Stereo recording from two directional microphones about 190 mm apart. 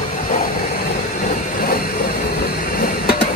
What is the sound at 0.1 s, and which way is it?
Vehicle, 45° left (ahead or behind).